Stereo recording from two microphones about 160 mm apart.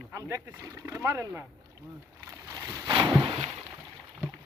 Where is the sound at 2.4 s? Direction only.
20° right (ahead or behind).